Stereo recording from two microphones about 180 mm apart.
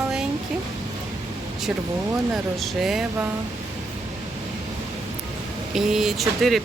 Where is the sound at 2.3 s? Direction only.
Centre (ahead or behind).